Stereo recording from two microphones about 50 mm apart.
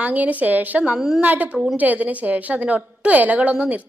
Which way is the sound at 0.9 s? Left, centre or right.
Centre.